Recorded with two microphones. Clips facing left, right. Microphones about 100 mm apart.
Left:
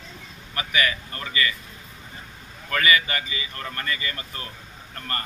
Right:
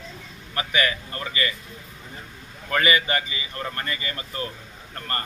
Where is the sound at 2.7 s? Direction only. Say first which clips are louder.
Right 1 dB; 25° right (ahead or behind).